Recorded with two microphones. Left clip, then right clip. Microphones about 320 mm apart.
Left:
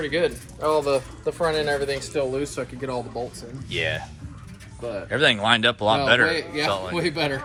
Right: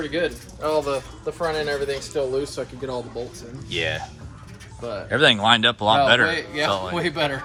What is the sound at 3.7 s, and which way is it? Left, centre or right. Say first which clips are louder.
Speech: right 1 dB; centre.